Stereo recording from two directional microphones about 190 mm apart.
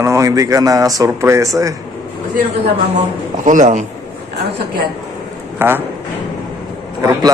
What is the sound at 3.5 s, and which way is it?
Speech, 40° right (ahead or behind).